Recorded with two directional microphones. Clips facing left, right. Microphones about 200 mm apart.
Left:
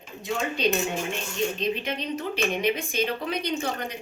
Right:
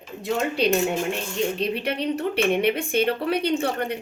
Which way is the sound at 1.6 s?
65° right (ahead or behind).